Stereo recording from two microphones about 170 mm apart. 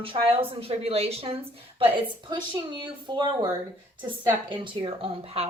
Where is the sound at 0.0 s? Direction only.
35° right (ahead or behind).